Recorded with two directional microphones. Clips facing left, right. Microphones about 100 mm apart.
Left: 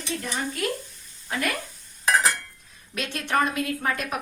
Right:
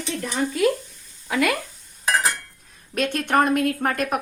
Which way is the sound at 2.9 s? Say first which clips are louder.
Right 5 dB; 50° right (ahead or behind).